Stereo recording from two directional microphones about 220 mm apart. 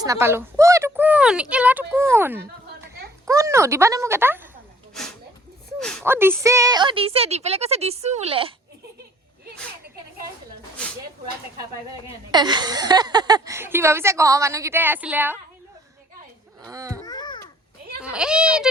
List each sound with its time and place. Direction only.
0.0 s a woman's voice: 10° right (ahead or behind)
5.8 s speech: 5° left (ahead or behind)
6.1 s a woman's voice: 10° right (ahead or behind)
12.0 s speech: 20° right (ahead or behind)
16.6 s speech: 15° right (ahead or behind)
17.1 s babbling: 20° left (ahead or behind)
18.0 s speech: 5° right (ahead or behind)